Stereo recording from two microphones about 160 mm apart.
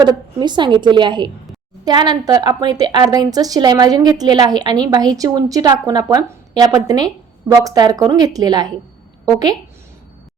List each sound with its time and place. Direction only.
0.0 s a woman's voice: 25° right (ahead or behind)